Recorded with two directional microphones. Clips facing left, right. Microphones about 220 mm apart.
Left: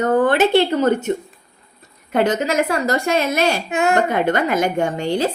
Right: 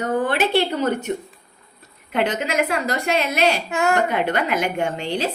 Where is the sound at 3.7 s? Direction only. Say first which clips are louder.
Left 3 dB; 20° left (ahead or behind).